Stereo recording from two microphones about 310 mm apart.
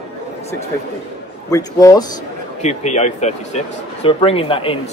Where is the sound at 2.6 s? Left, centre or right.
Left.